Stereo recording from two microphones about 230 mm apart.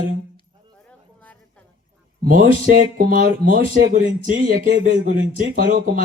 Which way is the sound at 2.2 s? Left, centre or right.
Right.